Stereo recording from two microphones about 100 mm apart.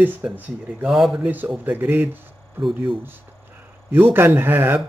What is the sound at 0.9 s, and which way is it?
Speech, 5° right (ahead or behind).